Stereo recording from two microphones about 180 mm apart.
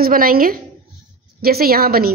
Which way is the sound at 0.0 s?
55° right (ahead or behind).